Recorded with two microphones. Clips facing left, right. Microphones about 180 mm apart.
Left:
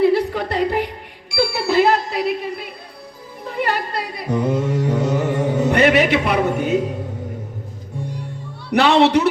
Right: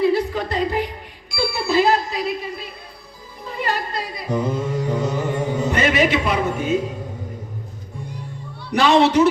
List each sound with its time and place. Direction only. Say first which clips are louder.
0.0 s music: left 2 dB; 65° left (ahead or behind)
3.4 s singing: left 3 dB; 65° left (ahead or behind)
5.6 s a man's voice: left 4 dB; 65° left (ahead or behind)
8.7 s speech: left 1 dB; 65° left (ahead or behind)